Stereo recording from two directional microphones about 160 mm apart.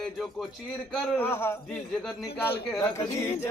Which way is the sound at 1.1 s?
15° left (ahead or behind).